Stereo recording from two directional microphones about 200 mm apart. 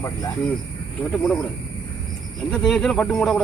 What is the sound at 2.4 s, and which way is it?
Speech, 5° left (ahead or behind).